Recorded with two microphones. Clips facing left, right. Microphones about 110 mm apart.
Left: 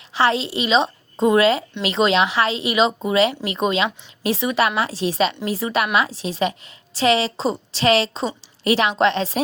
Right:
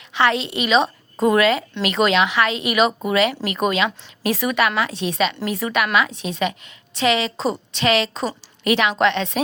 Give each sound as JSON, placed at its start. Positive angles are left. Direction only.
{"t": 0.1, "sound": "a woman's voice", "side_deg": 30}